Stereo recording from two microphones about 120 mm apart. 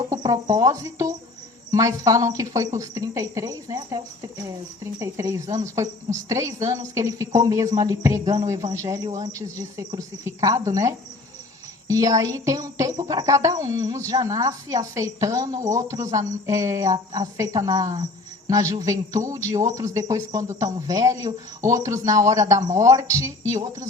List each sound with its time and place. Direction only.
0.1 s speech: 30° right (ahead or behind)